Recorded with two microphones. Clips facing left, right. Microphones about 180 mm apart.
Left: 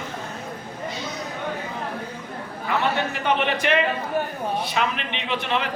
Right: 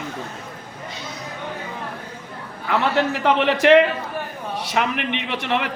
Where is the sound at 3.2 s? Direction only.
90° right.